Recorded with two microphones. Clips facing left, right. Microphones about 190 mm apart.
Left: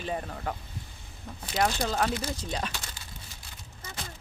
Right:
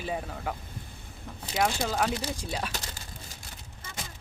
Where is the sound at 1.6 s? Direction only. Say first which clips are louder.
Even; 5° right (ahead or behind).